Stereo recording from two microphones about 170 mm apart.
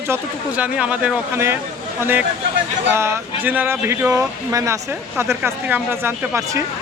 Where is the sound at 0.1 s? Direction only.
10° right (ahead or behind).